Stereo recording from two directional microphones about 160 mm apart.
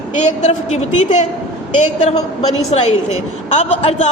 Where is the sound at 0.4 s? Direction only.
45° left (ahead or behind).